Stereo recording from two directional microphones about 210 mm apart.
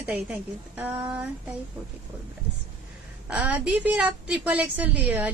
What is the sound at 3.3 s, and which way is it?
A woman's voice, 5° right (ahead or behind).